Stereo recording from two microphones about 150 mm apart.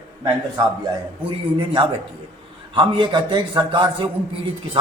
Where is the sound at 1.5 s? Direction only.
30° right (ahead or behind).